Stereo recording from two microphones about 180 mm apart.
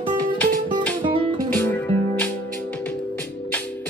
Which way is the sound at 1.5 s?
10° left (ahead or behind).